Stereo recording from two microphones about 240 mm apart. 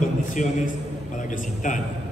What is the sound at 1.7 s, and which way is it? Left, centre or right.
Speech, left.